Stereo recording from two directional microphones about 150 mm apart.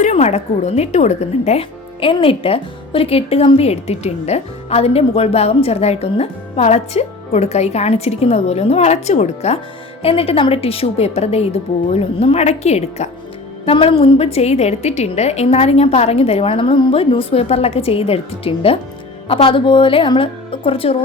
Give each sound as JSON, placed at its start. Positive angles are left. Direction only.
{"t": 0.0, "sound": "a woman's voice", "side_deg": 50}